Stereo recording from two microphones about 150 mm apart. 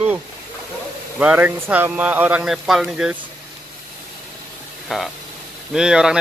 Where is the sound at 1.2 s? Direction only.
10° right (ahead or behind).